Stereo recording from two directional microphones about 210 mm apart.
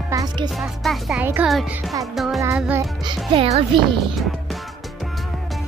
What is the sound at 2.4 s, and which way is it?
Music, 5° right (ahead or behind).